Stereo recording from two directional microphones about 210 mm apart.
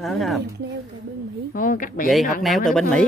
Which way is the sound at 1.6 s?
40° left (ahead or behind).